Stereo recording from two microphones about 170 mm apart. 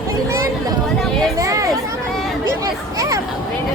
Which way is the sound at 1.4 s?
20° right (ahead or behind).